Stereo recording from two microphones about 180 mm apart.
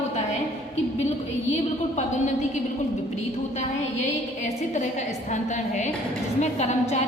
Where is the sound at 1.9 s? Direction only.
40° left (ahead or behind).